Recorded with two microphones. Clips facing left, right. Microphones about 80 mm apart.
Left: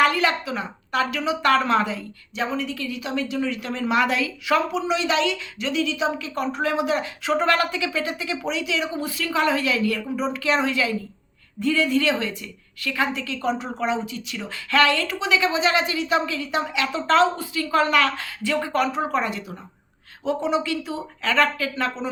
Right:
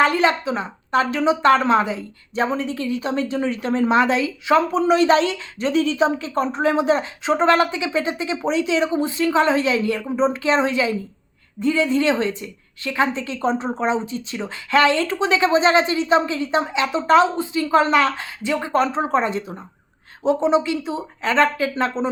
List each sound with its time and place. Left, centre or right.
0.0 s speech: right
2.3 s speech: right
4.7 s speech: right